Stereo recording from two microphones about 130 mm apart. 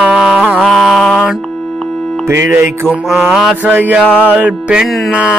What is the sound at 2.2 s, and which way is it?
Music, 20° right (ahead or behind).